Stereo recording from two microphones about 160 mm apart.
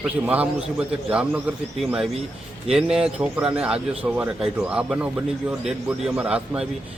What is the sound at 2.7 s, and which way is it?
A man's voice, 5° right (ahead or behind).